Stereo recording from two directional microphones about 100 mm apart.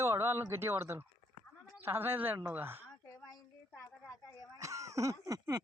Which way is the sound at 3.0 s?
35° left (ahead or behind).